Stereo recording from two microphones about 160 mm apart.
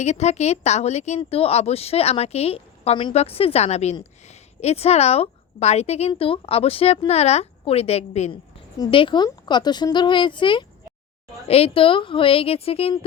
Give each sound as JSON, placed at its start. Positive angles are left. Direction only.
{"t": 0.0, "sound": "a woman's voice", "side_deg": 45}
{"t": 8.8, "sound": "a woman's voice", "side_deg": 30}